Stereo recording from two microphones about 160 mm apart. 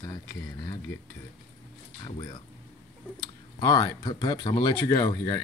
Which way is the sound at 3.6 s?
25° left (ahead or behind).